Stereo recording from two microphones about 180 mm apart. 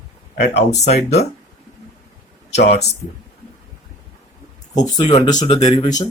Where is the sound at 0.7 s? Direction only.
40° left (ahead or behind).